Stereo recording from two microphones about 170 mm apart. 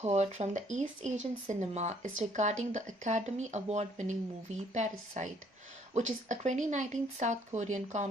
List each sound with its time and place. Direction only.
0.0 s speech: 40° right (ahead or behind)